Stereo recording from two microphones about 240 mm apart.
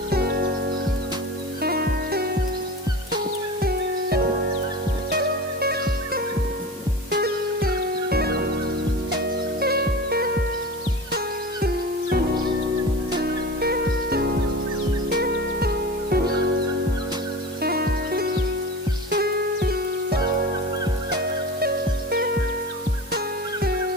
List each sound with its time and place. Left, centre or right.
0.1 s music: right
1.6 s music: right
3.6 s music: right
5.5 s music: right
9.6 s music: right
11.6 s music: right
13.2 s music: right
17.6 s music: right